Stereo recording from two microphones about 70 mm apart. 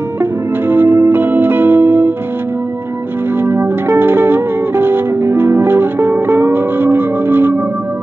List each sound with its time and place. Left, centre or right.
0.2 s music: right
3.3 s music: right